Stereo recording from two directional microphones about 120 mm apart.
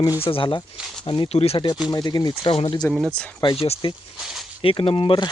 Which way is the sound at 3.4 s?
40° left (ahead or behind).